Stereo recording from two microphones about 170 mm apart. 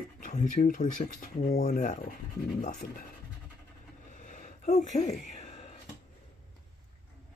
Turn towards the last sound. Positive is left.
turn(degrees=40)  # may be behind; listen again after turning